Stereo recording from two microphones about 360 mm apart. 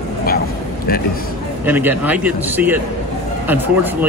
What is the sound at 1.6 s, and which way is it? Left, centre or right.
A man's voice, centre.